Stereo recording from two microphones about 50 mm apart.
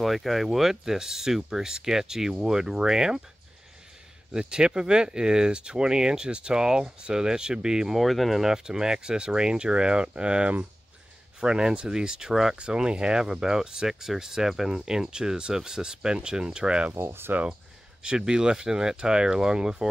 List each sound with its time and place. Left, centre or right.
0.0 s speech: centre
4.3 s speech: centre
8.0 s speech: centre
16.9 s speech: right
18.0 s speech: centre